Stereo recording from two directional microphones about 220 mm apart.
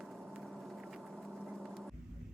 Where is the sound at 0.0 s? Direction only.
Centre (ahead or behind).